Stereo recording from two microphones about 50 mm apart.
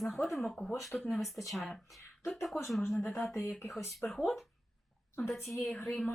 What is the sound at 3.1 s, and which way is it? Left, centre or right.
Speech, left.